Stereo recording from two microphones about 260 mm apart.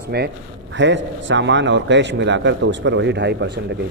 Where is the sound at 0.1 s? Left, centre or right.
Right.